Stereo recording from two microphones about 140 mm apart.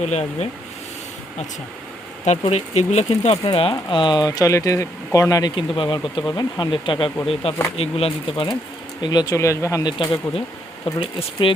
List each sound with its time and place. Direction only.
0.0 s speech: 50° left (ahead or behind)
2.2 s speech: 50° left (ahead or behind); by 10.2 s 25° left (ahead or behind)
11.0 s speech: 40° left (ahead or behind)